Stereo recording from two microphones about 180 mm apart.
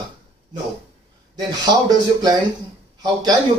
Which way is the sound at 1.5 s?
20° right (ahead or behind).